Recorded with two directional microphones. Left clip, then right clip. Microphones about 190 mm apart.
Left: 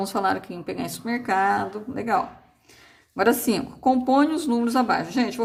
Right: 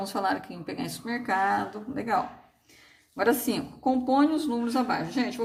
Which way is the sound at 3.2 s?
40° left (ahead or behind).